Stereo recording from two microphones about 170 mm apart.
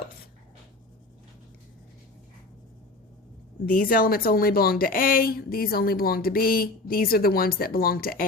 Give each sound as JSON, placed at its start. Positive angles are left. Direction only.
{"t": 3.7, "sound": "a woman's voice", "side_deg": 60}